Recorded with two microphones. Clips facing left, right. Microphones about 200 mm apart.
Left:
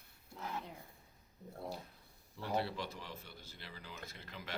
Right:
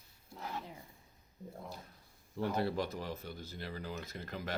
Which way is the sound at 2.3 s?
45° right (ahead or behind).